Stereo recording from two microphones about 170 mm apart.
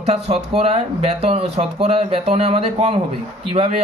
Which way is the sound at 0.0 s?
40° right (ahead or behind).